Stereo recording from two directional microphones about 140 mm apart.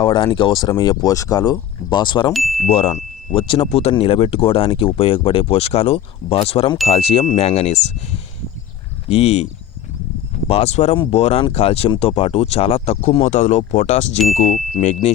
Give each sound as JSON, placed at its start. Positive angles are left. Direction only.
{"t": 0.0, "sound": "speech", "side_deg": 35}
{"t": 2.3, "sound": "speech", "side_deg": 0}
{"t": 2.6, "sound": "speech", "side_deg": 40}
{"t": 10.5, "sound": "speech", "side_deg": 50}